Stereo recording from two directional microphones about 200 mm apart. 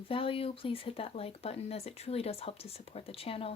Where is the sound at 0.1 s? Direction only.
25° left (ahead or behind).